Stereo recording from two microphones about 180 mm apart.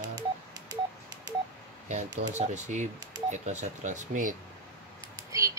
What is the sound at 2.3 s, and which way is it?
Speech, 40° right (ahead or behind).